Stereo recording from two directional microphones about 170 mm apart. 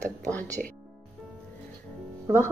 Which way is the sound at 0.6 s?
Centre (ahead or behind).